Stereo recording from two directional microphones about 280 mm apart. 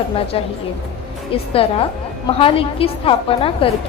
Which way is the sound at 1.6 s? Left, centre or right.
Centre.